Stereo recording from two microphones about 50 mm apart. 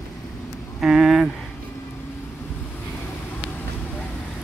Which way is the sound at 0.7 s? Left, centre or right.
Centre.